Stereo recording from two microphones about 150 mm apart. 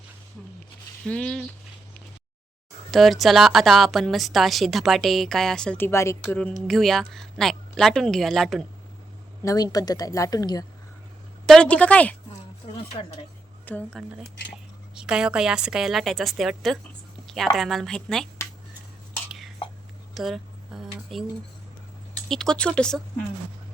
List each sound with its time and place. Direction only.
1.0 s a woman's voice: 5° left (ahead or behind)
2.9 s a woman's voice: centre (ahead or behind); by 6.3 s 20° left (ahead or behind)
6.7 s a woman's voice: centre (ahead or behind)
9.4 s speech: 25° left (ahead or behind)
11.4 s a woman's voice: 5° left (ahead or behind)
13.7 s a woman's voice: 10° left (ahead or behind)
14.9 s a woman's voice: 5° right (ahead or behind)
19.3 s whispering: centre (ahead or behind)
20.1 s a sound: centre (ahead or behind)
22.3 s a woman's voice: 5° left (ahead or behind)